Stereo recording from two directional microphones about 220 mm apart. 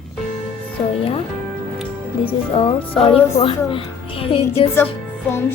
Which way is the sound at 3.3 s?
25° left (ahead or behind).